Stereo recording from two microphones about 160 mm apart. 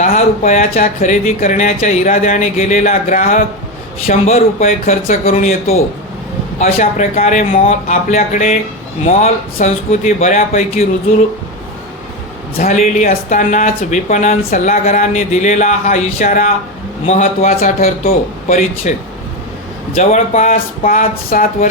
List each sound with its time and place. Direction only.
0.0 s speech: 45° left (ahead or behind)
12.6 s speech: 45° left (ahead or behind)
20.0 s speech: 45° left (ahead or behind)